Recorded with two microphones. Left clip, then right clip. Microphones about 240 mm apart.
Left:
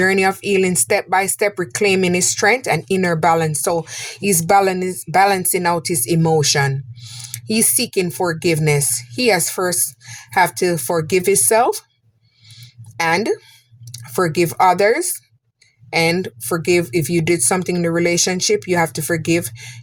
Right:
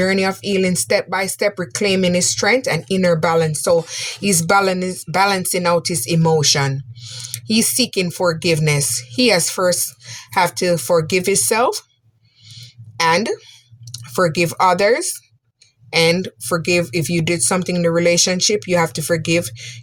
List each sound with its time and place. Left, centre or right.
0.0 s speech: left
12.5 s a sound: left
15.9 s speech: left